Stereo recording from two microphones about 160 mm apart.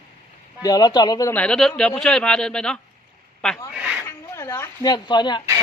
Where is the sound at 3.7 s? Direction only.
5° right (ahead or behind).